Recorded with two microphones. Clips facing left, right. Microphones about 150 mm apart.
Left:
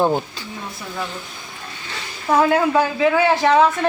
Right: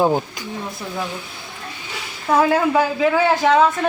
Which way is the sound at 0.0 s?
10° right (ahead or behind).